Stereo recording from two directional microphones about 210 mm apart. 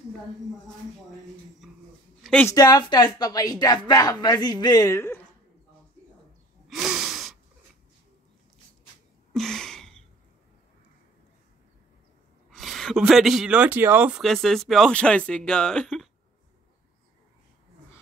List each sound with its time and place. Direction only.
1.6 s speech: centre (ahead or behind)
2.4 s speech: 20° left (ahead or behind)
6.7 s gasp: 5° right (ahead or behind)
9.3 s a sound: centre (ahead or behind)
12.4 s speech: centre (ahead or behind)